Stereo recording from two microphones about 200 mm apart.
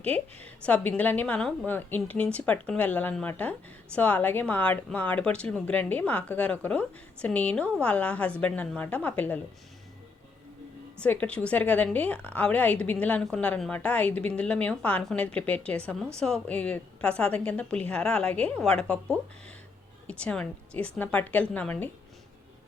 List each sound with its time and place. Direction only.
0.0 s a woman's voice: 5° left (ahead or behind)
11.0 s a woman's voice: 5° left (ahead or behind)